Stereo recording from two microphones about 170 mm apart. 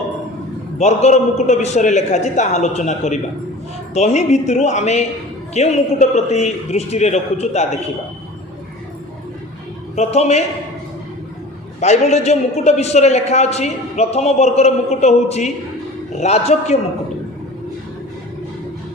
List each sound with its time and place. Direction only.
0.8 s a man's voice: 40° left (ahead or behind)
9.9 s a man's voice: 40° left (ahead or behind)
11.8 s a man's voice: 40° left (ahead or behind)